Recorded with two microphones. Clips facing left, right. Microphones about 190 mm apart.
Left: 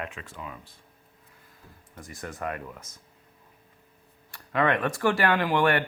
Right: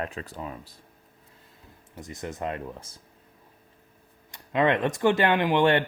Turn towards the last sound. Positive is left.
turn(degrees=-25)  # may be behind; listen again after turning